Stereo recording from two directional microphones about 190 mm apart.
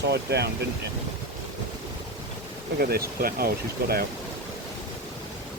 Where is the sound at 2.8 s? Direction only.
55° right (ahead or behind).